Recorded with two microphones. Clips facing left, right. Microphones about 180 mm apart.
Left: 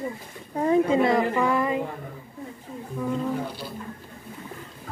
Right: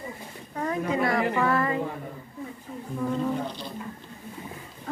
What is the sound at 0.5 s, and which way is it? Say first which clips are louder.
A woman's voice: left 7 dB; 25° left (ahead or behind).